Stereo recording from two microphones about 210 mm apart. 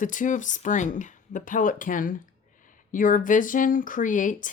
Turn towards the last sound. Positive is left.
turn(degrees=35)  # may be behind; listen again after turning